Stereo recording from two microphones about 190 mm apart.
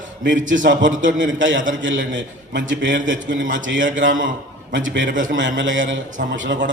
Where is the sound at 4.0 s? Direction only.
85° right.